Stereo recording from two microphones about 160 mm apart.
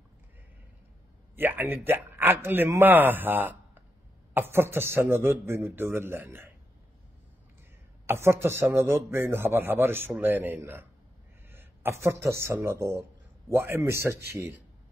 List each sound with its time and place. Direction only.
1.3 s a man's voice: 10° right (ahead or behind)
8.1 s a man's voice: 15° right (ahead or behind)